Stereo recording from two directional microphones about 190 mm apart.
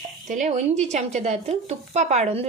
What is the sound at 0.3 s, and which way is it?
Speech, 40° right (ahead or behind).